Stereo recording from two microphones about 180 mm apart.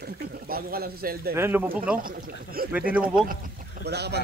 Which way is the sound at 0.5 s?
55° right (ahead or behind).